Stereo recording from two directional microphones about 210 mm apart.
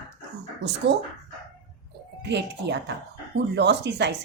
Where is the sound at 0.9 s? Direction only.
55° right (ahead or behind).